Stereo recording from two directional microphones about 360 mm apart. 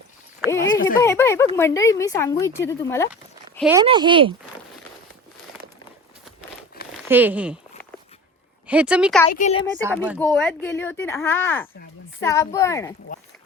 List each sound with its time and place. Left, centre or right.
0.9 s speech: centre
6.8 s a sound: left
7.1 s speech: centre
8.6 s speech: centre
9.3 s speech: centre
9.8 s speech: centre
13.1 s speech: left